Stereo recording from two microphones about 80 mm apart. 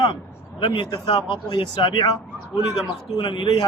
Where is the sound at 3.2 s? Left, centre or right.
Left.